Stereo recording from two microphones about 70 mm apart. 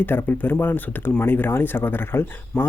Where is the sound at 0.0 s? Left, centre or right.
Left.